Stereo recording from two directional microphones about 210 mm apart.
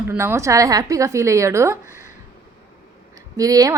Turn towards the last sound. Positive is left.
turn(degrees=-15)  # may be behind; listen again after turning